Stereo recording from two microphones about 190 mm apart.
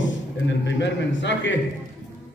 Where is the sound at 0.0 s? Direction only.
70° left (ahead or behind).